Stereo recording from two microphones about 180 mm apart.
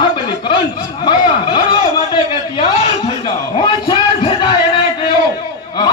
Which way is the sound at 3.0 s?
30° left (ahead or behind).